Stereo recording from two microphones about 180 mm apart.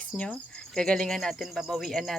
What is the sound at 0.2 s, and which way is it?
Speech, 5° left (ahead or behind).